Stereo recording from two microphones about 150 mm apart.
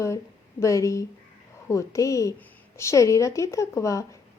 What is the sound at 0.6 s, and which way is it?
A woman's voice, 20° left (ahead or behind).